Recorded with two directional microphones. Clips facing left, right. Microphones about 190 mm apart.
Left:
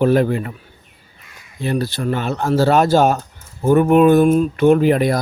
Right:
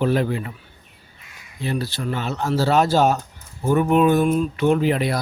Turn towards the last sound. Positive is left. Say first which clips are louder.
# left 5 dB
turn(degrees=45)  # may be behind; listen again after turning